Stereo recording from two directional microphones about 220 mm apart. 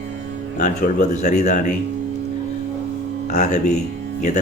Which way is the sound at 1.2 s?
35° left (ahead or behind).